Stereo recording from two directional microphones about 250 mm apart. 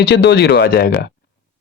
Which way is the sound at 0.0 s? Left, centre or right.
Left.